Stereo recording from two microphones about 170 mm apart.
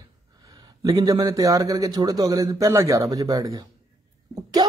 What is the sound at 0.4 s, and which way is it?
Speech, 20° right (ahead or behind).